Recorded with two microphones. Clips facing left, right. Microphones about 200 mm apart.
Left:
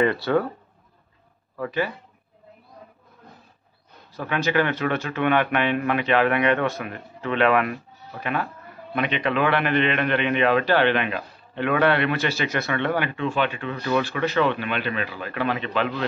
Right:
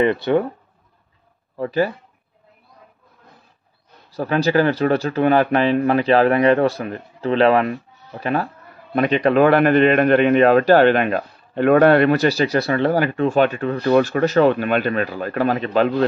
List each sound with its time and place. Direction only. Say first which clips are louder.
0.0 s speech: right 4 dB; 20° right (ahead or behind)
1.6 s speech: right 6 dB; 35° right (ahead or behind)
4.1 s a man's voice: right 6 dB; 35° right (ahead or behind)